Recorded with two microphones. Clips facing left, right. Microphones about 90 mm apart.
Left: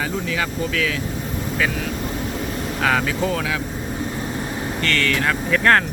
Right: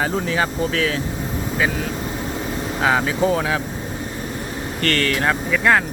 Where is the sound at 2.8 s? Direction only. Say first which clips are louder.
Right 2 dB; 25° right (ahead or behind).